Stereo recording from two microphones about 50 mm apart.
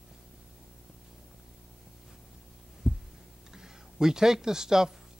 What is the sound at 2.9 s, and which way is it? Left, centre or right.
Heart sounds, centre.